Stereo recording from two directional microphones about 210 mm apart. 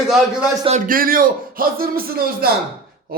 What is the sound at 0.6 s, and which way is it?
Speech, 35° right (ahead or behind).